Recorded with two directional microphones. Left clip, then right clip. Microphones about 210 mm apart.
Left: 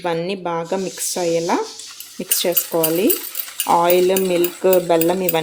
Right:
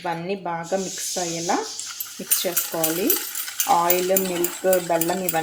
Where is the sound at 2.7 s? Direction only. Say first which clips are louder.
Left 7 dB; 55° left (ahead or behind).